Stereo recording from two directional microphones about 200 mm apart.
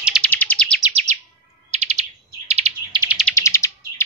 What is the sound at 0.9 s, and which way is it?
Chirp, 30° right (ahead or behind).